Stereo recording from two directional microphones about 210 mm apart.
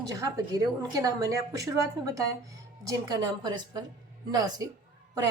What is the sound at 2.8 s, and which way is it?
A woman's voice, 20° right (ahead or behind).